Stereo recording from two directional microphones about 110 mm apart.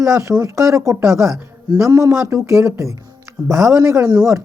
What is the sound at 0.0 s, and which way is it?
Speech, 30° right (ahead or behind).